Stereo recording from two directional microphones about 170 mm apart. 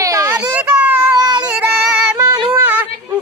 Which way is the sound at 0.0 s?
20° right (ahead or behind).